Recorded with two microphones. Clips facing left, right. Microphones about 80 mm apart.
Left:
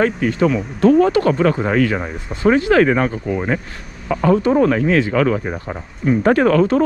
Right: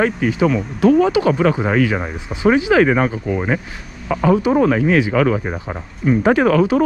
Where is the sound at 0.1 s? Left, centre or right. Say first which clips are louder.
Even; centre.